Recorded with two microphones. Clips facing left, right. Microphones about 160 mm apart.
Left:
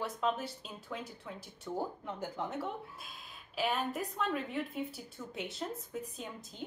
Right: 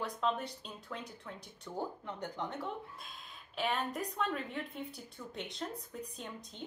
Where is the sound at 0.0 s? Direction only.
5° left (ahead or behind).